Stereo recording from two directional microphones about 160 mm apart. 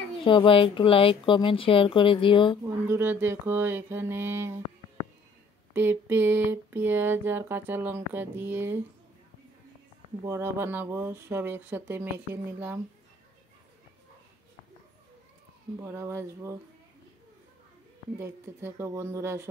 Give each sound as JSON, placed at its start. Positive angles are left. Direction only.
{"t": 0.1, "sound": "a woman's voice", "side_deg": 30}
{"t": 2.6, "sound": "speech", "side_deg": -15}
{"t": 5.7, "sound": "speech", "side_deg": -15}
{"t": 10.2, "sound": "speech", "side_deg": -15}
{"t": 15.8, "sound": "speech", "side_deg": -15}
{"t": 18.1, "sound": "speech", "side_deg": -15}